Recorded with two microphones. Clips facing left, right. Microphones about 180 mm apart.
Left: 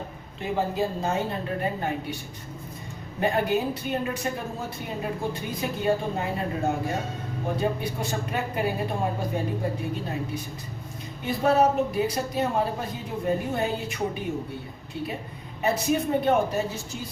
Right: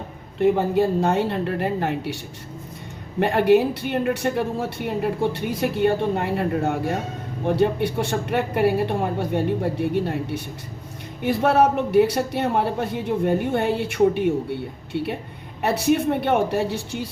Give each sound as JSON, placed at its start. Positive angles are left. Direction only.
{"t": 0.3, "sound": "speech", "side_deg": -70}
{"t": 3.2, "sound": "speech", "side_deg": -70}